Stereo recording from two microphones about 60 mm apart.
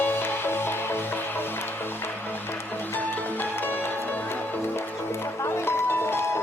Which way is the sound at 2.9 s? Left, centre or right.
Left.